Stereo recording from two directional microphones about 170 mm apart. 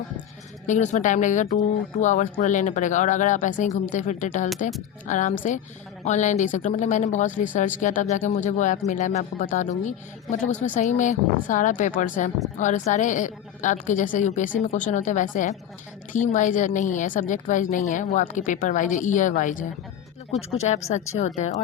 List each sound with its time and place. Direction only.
0.7 s a woman's voice: 45° left (ahead or behind)